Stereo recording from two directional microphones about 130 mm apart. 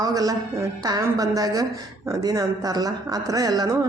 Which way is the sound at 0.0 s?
30° right (ahead or behind).